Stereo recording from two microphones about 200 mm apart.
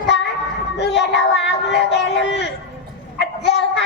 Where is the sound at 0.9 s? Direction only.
60° left (ahead or behind).